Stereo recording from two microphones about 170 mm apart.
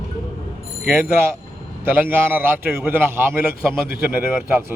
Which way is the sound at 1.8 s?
10° right (ahead or behind).